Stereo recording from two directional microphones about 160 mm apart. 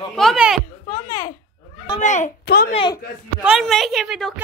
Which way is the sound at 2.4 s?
80° left.